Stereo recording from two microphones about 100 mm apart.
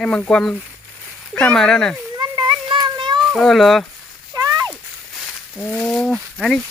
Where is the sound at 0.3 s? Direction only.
5° left (ahead or behind).